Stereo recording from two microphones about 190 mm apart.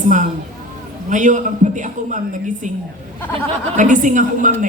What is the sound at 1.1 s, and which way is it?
Speech, 40° right (ahead or behind).